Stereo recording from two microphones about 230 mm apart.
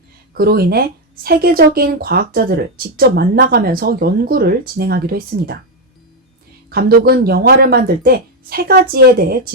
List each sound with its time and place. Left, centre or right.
0.3 s speech: right
6.7 s speech: right